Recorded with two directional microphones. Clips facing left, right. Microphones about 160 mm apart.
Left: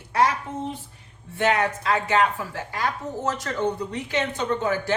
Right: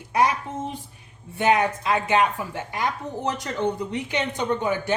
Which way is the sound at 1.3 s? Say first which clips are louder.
Right 2 dB; 15° right (ahead or behind).